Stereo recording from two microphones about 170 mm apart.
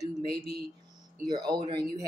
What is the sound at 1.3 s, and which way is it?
Speech, 25° right (ahead or behind).